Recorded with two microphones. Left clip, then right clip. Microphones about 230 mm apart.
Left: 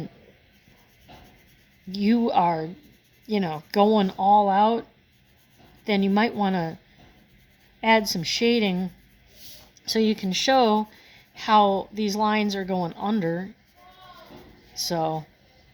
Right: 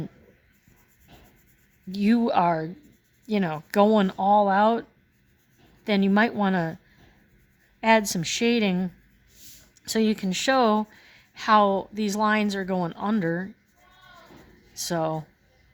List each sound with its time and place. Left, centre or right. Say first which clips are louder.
2.0 s speech: left 1 dB; right
7.8 s speech: even; right
9.9 s speech: left 2 dB; right
14.8 s speech: left 1 dB; right